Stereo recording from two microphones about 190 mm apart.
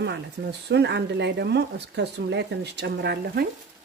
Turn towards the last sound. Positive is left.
turn(degrees=-60)  # may be behind; listen again after turning